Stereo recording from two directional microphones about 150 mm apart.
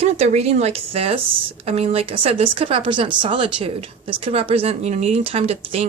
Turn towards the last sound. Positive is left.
turn(degrees=-45)  # may be behind; listen again after turning